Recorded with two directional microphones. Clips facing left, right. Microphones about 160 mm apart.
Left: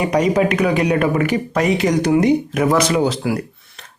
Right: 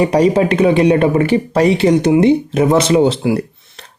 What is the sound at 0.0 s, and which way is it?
Speech, 30° right (ahead or behind).